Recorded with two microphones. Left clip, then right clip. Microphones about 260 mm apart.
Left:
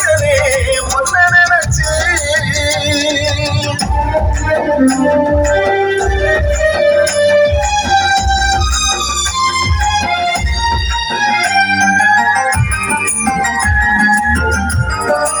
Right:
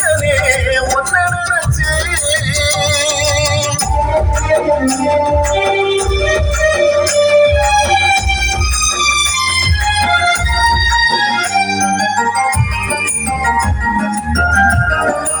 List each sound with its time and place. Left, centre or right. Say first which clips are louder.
4.1 s music: right 2 dB; right
11.2 s music: left 2 dB; right